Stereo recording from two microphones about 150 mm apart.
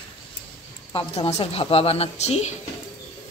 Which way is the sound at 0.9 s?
35° left (ahead or behind).